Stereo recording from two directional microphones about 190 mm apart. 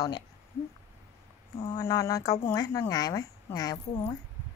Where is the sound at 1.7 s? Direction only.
15° left (ahead or behind).